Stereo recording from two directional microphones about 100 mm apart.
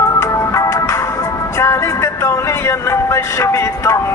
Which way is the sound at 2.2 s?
30° left (ahead or behind).